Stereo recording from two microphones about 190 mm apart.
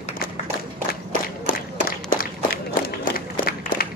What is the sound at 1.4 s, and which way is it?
Run, 45° left (ahead or behind).